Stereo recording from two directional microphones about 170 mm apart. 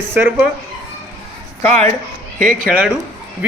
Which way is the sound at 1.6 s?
10° left (ahead or behind).